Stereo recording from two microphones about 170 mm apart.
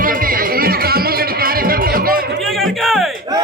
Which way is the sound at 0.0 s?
55° right (ahead or behind).